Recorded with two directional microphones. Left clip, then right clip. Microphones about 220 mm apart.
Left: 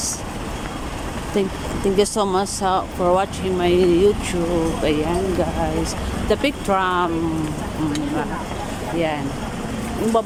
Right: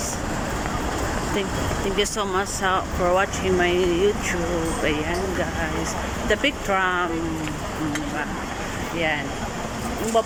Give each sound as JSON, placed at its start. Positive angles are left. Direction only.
{"t": 2.0, "sound": "speech", "side_deg": 25}
{"t": 6.3, "sound": "speech", "side_deg": 15}